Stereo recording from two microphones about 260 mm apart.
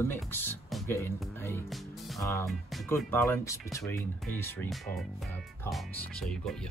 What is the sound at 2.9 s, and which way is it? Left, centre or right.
Speech, centre.